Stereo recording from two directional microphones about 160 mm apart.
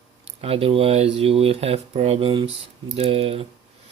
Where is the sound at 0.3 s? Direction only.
40° right (ahead or behind).